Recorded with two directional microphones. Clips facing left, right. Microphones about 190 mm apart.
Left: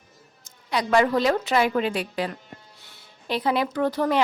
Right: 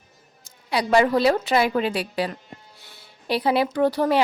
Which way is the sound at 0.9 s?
35° right (ahead or behind).